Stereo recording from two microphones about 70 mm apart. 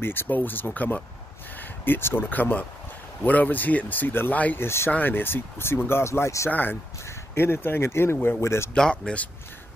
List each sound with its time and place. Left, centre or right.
0.0 s speech: left
6.5 s speech: left
8.7 s speech: centre